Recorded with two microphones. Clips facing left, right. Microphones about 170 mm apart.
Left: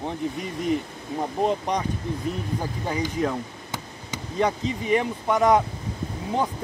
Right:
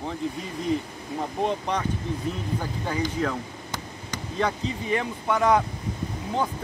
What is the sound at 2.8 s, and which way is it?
Speech, 20° left (ahead or behind).